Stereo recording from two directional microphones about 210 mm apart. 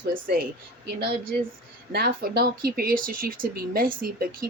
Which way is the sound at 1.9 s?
45° right (ahead or behind).